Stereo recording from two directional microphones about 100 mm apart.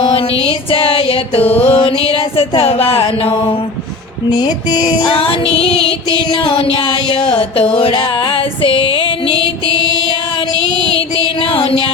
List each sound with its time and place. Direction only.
0.0 s music: 70° left (ahead or behind)
4.3 s a sound: 45° left (ahead or behind)
5.1 s music: 70° left (ahead or behind)